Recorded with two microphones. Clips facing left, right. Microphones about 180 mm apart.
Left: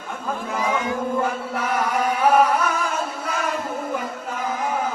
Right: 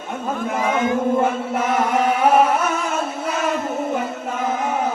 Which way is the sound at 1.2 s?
25° right (ahead or behind).